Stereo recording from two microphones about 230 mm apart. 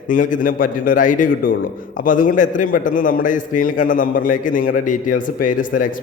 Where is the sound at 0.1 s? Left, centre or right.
Left.